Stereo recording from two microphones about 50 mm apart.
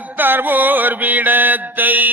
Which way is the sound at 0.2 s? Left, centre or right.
Right.